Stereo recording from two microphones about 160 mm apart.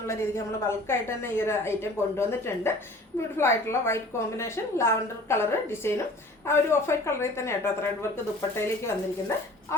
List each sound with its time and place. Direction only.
0.1 s a woman's voice: 15° left (ahead or behind)